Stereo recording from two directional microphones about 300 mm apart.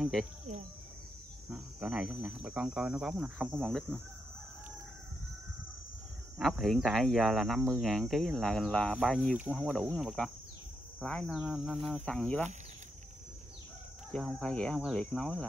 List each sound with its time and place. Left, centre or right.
0.0 s speech: centre
1.5 s speech: centre
6.3 s speech: centre
14.1 s speech: centre